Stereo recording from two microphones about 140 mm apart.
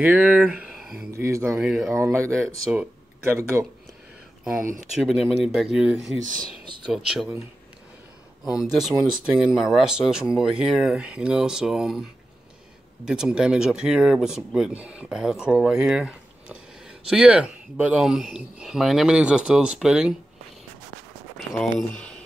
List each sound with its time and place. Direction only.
0.0 s speech: 10° right (ahead or behind)
1.1 s speech: 20° right (ahead or behind)
1.6 s speech: 5° right (ahead or behind)
2.0 s speech: 20° right (ahead or behind)
5.0 s speech: centre (ahead or behind)
8.7 s speech: 5° right (ahead or behind)